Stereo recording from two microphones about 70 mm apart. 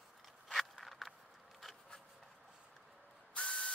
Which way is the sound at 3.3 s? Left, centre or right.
Centre.